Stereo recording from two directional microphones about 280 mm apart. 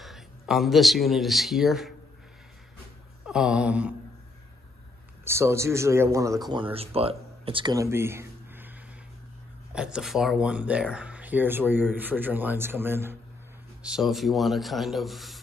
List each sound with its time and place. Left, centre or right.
0.0 s speech: centre
3.3 s speech: centre
5.2 s speech: centre
9.8 s speech: centre